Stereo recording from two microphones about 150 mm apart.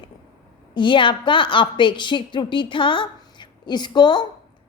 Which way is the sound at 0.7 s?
30° left (ahead or behind).